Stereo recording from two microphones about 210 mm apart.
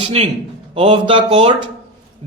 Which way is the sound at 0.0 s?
30° right (ahead or behind).